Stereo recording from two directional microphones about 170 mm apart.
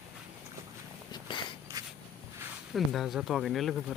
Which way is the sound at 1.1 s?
25° left (ahead or behind).